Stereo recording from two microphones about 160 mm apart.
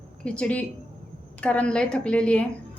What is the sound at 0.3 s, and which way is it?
A woman's voice, 5° left (ahead or behind).